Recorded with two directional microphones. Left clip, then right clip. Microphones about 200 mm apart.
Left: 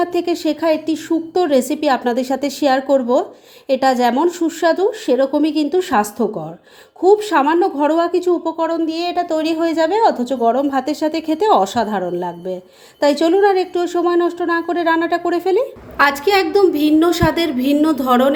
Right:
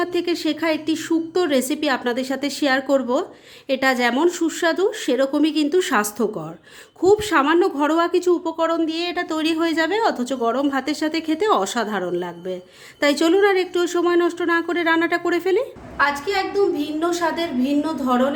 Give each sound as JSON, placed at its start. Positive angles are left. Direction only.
{"t": 0.0, "sound": "a woman's voice", "side_deg": 5}
{"t": 16.0, "sound": "a woman's voice", "side_deg": 45}